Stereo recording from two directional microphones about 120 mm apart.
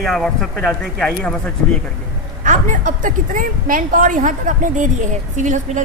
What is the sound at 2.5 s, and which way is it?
A woman's voice, 90° right.